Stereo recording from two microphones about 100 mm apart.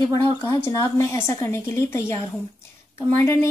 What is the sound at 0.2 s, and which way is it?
A woman's voice, 25° left (ahead or behind).